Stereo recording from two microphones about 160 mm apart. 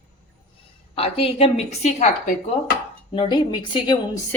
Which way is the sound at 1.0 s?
35° left (ahead or behind).